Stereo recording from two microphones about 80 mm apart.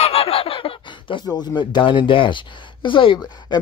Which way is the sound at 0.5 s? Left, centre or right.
Left.